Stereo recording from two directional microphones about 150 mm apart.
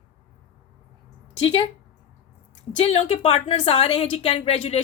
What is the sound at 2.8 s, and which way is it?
Speech, 40° left (ahead or behind).